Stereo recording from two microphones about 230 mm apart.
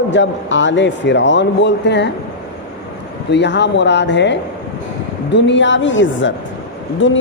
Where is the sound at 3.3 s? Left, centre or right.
Left.